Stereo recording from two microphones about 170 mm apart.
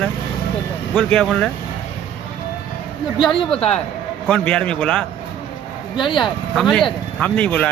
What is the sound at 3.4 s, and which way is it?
A man's voice, 5° left (ahead or behind).